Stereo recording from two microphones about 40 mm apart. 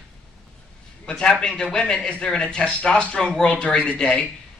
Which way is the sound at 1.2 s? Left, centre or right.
Centre.